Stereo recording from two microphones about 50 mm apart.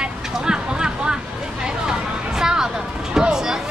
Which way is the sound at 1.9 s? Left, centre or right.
Centre.